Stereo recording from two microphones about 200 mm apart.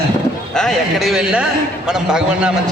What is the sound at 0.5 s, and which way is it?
A man's voice, centre (ahead or behind).